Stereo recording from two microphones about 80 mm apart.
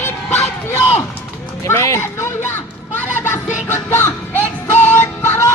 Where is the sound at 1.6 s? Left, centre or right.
Left.